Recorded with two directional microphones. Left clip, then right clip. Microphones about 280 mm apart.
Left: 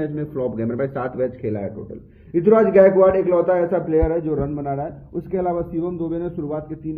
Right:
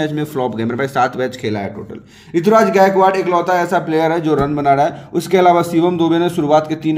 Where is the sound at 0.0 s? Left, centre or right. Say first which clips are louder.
Right 6 dB; right.